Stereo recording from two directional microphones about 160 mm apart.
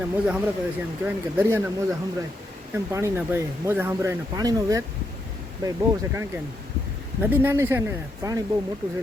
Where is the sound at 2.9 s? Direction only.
15° right (ahead or behind).